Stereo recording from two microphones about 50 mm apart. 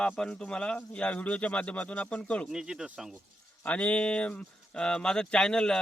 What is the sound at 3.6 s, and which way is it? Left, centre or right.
Speech, left.